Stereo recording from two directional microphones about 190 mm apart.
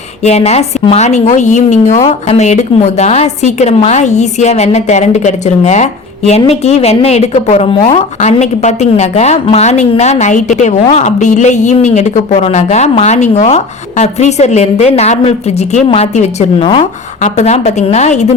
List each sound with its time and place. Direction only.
0.2 s a woman's voice: 35° left (ahead or behind)